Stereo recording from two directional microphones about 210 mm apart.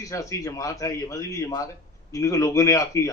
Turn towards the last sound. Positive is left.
turn(degrees=15)  # may be behind; listen again after turning